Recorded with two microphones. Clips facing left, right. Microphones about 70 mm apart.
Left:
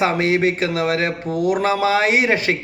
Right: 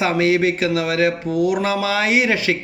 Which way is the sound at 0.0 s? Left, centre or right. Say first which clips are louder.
Even; left.